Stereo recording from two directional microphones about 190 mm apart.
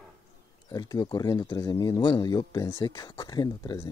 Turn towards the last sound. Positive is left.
turn(degrees=20)  # may be behind; listen again after turning